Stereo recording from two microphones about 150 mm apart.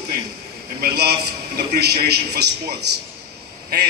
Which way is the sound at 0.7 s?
90° right.